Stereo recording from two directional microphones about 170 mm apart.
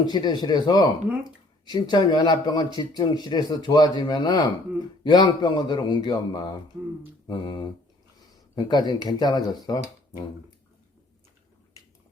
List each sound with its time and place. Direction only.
0.0 s speech: 25° left (ahead or behind)